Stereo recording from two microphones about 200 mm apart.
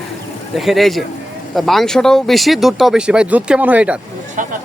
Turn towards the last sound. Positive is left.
turn(degrees=-40)  # may be behind; listen again after turning